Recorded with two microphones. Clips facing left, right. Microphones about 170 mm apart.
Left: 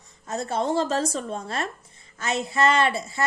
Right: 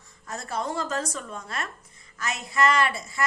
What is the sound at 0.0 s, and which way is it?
A woman's voice, 25° left (ahead or behind).